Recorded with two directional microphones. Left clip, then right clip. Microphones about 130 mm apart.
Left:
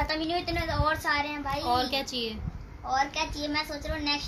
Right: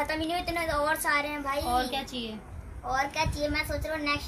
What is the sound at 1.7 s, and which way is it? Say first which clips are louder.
Speech: left 5 dB; 90° left.